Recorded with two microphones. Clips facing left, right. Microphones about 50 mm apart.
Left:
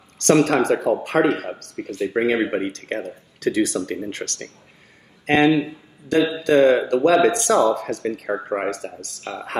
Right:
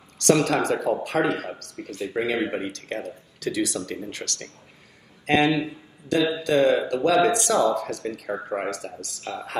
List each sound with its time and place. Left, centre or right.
0.2 s a man's voice: left